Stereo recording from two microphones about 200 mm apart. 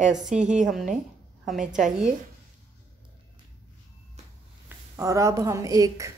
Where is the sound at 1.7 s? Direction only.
Centre (ahead or behind).